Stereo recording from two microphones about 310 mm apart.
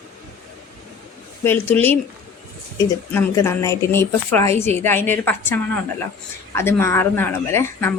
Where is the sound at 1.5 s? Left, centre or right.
Centre.